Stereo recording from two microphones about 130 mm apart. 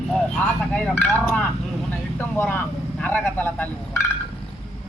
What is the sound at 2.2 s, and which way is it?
Vehicle, 15° left (ahead or behind).